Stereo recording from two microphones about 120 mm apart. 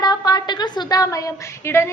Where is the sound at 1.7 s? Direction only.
20° left (ahead or behind).